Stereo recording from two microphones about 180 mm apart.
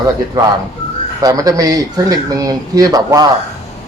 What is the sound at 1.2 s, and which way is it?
Speech, 20° right (ahead or behind).